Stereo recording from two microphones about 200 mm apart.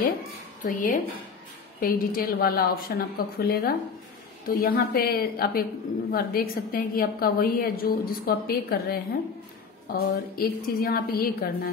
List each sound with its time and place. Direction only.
0.7 s a woman's voice: 40° left (ahead or behind)